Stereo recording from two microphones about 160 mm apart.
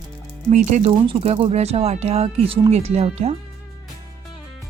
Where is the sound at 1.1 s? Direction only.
35° right (ahead or behind).